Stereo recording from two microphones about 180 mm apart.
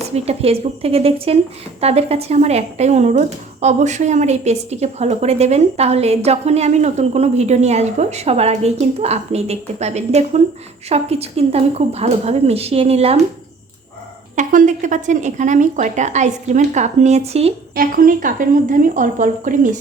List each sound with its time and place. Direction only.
0.1 s speech: 35° right (ahead or behind)
14.3 s a woman's voice: 45° right (ahead or behind)
17.7 s a woman's voice: 50° right (ahead or behind)